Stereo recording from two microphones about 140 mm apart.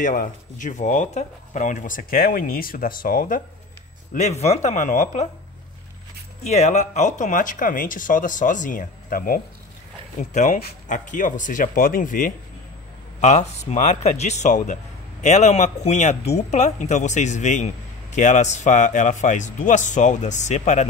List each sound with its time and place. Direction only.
0.0 s speech: 70° left (ahead or behind)
4.1 s speech: 55° left (ahead or behind)
6.4 s speech: 55° left (ahead or behind); by 9.4 s 90° left
10.3 s speech: 65° left (ahead or behind)
13.2 s speech: 55° left (ahead or behind)